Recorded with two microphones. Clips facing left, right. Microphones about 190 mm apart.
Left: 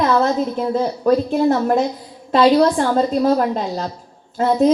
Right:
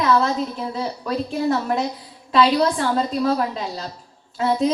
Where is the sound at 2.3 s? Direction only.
45° left (ahead or behind).